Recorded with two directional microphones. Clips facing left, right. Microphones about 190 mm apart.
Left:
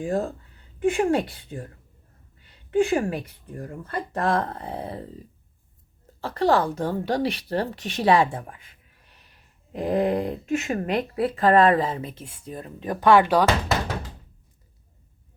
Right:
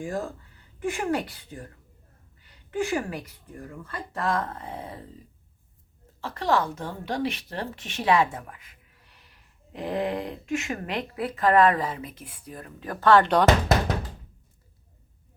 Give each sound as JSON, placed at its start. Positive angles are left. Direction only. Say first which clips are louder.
{"t": 0.0, "sound": "a woman's voice", "louder": "left 5 dB", "side_deg": 30}
{"t": 3.6, "sound": "a woman's voice", "louder": "left 6 dB", "side_deg": 40}
{"t": 6.2, "sound": "a woman's voice", "louder": "left 4 dB", "side_deg": 35}